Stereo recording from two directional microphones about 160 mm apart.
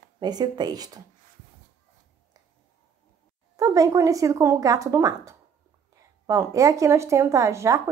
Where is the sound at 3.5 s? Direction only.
20° right (ahead or behind).